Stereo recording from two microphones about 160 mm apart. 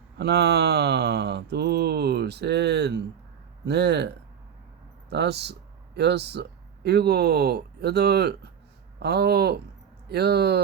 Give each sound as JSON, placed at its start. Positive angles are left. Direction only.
{"t": 0.2, "sound": "mantra", "side_deg": -90}
{"t": 5.0, "sound": "speech", "side_deg": -90}
{"t": 10.1, "sound": "mantra", "side_deg": -85}